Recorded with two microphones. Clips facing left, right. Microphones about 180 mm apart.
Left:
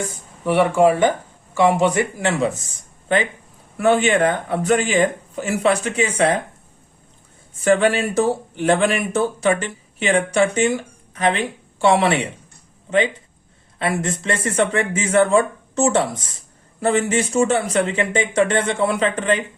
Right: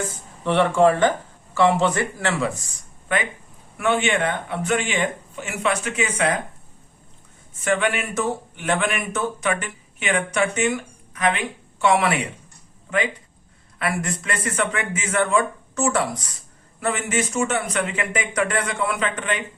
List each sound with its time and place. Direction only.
0.0 s speech: 10° left (ahead or behind)
3.8 s speech: 35° left (ahead or behind)
7.6 s speech: 35° left (ahead or behind)
13.7 s speech: 25° left (ahead or behind)